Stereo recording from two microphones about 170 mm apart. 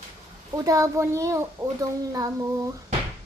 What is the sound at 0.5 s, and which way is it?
Speech, 20° right (ahead or behind).